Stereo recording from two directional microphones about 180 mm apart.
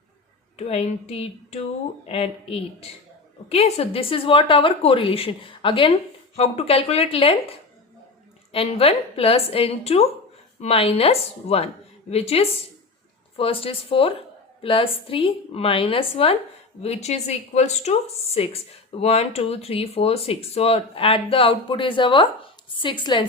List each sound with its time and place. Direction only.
0.5 s a woman's voice: 35° left (ahead or behind)
8.5 s a woman's voice: 35° left (ahead or behind)